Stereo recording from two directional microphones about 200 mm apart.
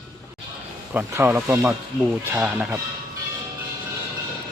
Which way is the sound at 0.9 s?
10° right (ahead or behind).